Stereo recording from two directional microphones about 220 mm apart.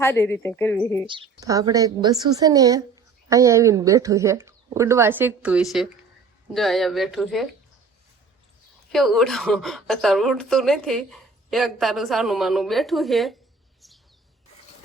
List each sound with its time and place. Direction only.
0.0 s speech: 10° left (ahead or behind)
1.0 s a woman's voice: 20° right (ahead or behind); by 7.4 s centre (ahead or behind)
8.9 s a woman's voice: centre (ahead or behind)